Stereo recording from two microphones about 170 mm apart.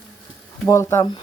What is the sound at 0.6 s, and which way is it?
Speech, 15° left (ahead or behind).